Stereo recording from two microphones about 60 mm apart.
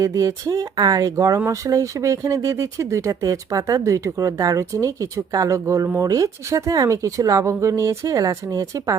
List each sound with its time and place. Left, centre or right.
0.0 s speech: right
1.1 s a woman's voice: right
6.0 s a woman's voice: right
7.4 s a woman's voice: right